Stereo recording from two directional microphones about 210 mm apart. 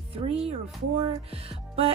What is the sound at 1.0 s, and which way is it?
Speech, 25° right (ahead or behind).